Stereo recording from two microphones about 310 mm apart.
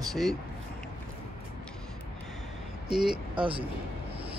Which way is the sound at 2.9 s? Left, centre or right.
Centre.